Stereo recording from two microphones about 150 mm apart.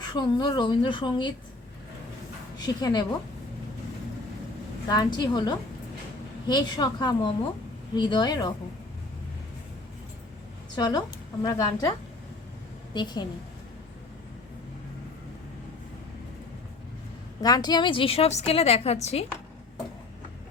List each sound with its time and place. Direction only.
0.0 s a woman's voice: 30° left (ahead or behind)
2.6 s a woman's voice: 25° left (ahead or behind)
4.9 s a woman's voice: 30° left (ahead or behind)
10.8 s a woman's voice: 25° left (ahead or behind)
17.4 s a woman's voice: 25° left (ahead or behind); by 19.2 s 45° left (ahead or behind)